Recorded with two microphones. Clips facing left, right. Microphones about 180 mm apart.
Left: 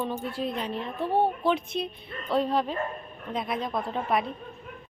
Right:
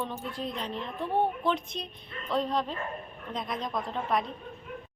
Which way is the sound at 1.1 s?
30° left (ahead or behind).